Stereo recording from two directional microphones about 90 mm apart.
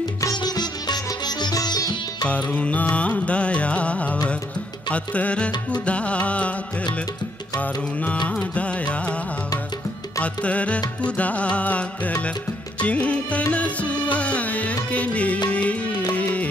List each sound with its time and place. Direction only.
0.4 s music: 50° left (ahead or behind)
2.2 s music: 15° left (ahead or behind)
8.3 s music: 15° left (ahead or behind)
10.2 s music: 15° left (ahead or behind)